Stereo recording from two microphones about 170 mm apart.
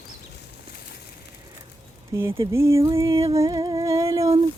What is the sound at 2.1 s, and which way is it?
Music, 15° right (ahead or behind).